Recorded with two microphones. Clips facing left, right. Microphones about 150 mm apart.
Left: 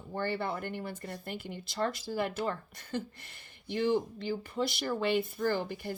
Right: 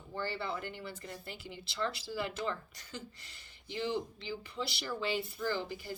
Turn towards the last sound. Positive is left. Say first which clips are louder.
# left 5 dB
turn(degrees=55)  # may be behind; listen again after turning